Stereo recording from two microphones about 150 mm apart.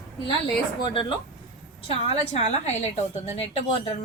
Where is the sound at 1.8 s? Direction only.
45° left (ahead or behind).